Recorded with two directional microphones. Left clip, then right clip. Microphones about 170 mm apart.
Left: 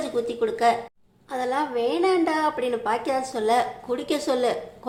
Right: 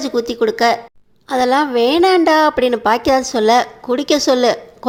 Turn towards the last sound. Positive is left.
turn(degrees=-35)  # may be behind; listen again after turning